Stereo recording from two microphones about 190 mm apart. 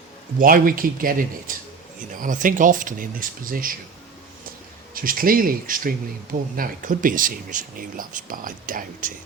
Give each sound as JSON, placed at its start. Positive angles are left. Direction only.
{"t": 0.3, "sound": "speech", "side_deg": -50}
{"t": 2.1, "sound": "speech", "side_deg": -45}
{"t": 4.9, "sound": "speech", "side_deg": -50}